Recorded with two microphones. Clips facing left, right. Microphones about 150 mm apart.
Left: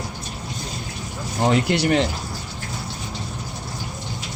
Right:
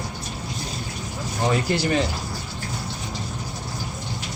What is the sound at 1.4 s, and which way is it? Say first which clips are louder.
Speech: left 3 dB; 70° left (ahead or behind).